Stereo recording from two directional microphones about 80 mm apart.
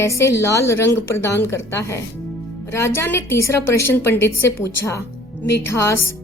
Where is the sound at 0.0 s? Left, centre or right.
Left.